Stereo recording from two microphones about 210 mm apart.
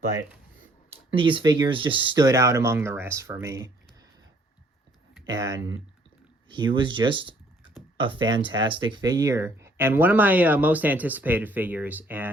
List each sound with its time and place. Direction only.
1.1 s speech: 25° right (ahead or behind)
5.2 s speech: 20° right (ahead or behind)